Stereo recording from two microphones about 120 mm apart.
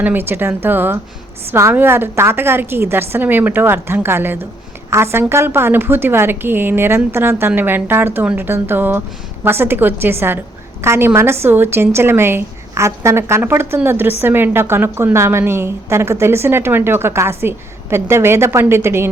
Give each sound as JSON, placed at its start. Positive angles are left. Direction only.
{"t": 0.0, "sound": "a woman's voice", "side_deg": -15}